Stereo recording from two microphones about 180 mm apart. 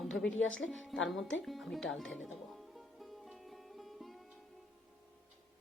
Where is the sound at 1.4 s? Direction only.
Centre (ahead or behind).